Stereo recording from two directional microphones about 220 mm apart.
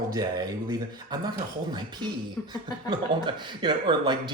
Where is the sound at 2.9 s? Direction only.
20° right (ahead or behind).